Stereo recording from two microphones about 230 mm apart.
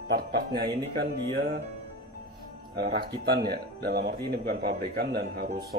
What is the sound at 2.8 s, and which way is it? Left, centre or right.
Speech, right.